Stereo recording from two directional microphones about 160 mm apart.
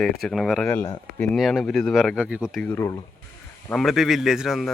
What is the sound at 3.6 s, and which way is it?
Speech, centre (ahead or behind).